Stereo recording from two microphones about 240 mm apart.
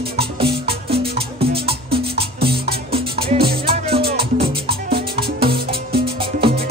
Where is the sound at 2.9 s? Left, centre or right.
Right.